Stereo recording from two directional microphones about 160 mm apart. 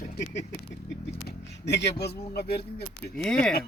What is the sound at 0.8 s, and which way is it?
Speech, 90° left.